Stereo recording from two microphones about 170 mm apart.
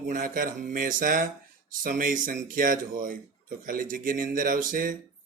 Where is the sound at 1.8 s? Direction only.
55° right (ahead or behind).